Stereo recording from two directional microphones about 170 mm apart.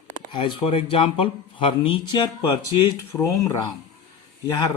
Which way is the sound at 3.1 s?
15° left (ahead or behind).